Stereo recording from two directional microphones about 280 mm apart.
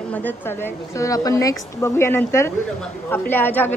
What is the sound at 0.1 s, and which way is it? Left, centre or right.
A woman's voice, centre.